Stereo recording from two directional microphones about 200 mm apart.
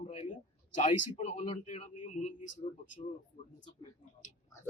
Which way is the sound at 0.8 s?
35° left (ahead or behind).